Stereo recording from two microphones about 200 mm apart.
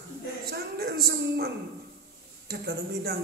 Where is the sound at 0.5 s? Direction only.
50° right (ahead or behind).